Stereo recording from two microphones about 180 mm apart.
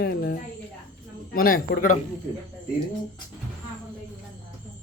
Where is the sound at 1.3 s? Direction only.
50° left (ahead or behind).